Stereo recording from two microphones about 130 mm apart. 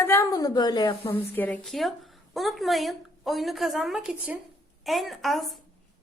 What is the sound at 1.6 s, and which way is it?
A woman's voice, centre (ahead or behind).